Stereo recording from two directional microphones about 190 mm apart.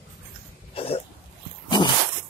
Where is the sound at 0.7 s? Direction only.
30° left (ahead or behind).